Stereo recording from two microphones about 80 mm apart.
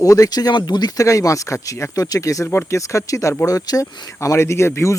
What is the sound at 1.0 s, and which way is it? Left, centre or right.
Speech, left.